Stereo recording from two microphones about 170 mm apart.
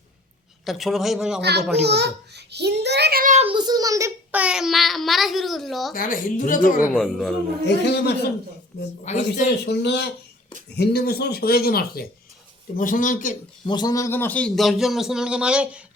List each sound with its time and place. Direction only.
0.6 s a child's voice: centre (ahead or behind)
1.4 s a child's voice: 75° right (ahead or behind)
3.3 s a child's voice: 30° right (ahead or behind); by 5.9 s centre (ahead or behind)
5.9 s a woman's voice: 55° left (ahead or behind)
6.9 s a child's voice: centre (ahead or behind)
7.9 s a man's voice: 80° left
9.0 s a woman's voice: 45° left (ahead or behind)
9.6 s speech: 90° left
10.8 s speech: 65° left (ahead or behind)
12.7 s a woman's voice: 50° left (ahead or behind)
13.7 s a child's voice: 25° left (ahead or behind); by 16.0 s 5° right (ahead or behind)